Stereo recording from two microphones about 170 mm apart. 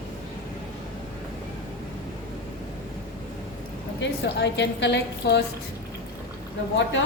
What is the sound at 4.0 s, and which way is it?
A woman's voice, 90° left.